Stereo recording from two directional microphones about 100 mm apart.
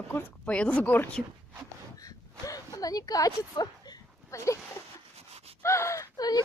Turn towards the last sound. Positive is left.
turn(degrees=40)  # may be behind; listen again after turning